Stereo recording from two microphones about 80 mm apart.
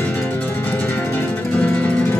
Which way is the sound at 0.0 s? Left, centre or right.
Left.